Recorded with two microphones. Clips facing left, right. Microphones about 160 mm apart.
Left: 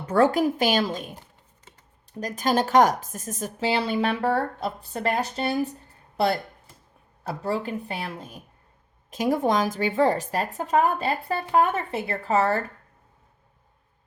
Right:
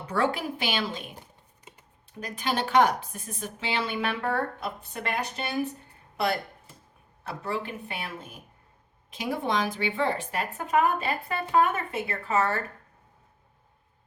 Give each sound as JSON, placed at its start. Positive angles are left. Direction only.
{"t": 0.0, "sound": "a woman's voice", "side_deg": 45}
{"t": 1.7, "sound": "computer keyboard", "side_deg": -15}
{"t": 2.2, "sound": "speech", "side_deg": 40}
{"t": 7.3, "sound": "speech", "side_deg": 35}